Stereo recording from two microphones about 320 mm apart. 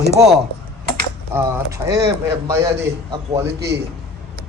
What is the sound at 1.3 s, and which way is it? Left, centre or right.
A man's voice, centre.